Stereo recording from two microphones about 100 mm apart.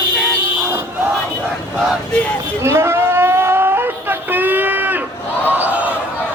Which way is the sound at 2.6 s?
25° right (ahead or behind).